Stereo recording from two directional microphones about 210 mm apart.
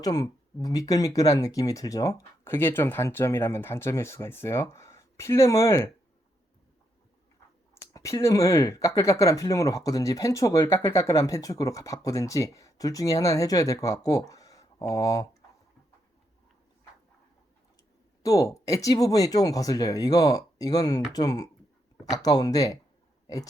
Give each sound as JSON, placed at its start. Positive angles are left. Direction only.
{"t": 0.0, "sound": "speech", "side_deg": 20}
{"t": 7.8, "sound": "speech", "side_deg": 15}
{"t": 18.2, "sound": "speech", "side_deg": 15}